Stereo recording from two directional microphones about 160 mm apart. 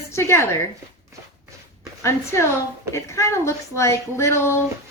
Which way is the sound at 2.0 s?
15° left (ahead or behind).